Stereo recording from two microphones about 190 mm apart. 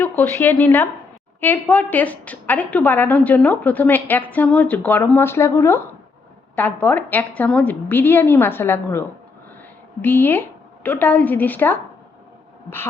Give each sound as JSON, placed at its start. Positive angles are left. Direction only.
{"t": 0.0, "sound": "a woman's voice", "side_deg": 10}